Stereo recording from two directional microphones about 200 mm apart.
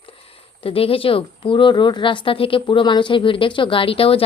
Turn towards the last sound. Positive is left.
turn(degrees=30)  # may be behind; listen again after turning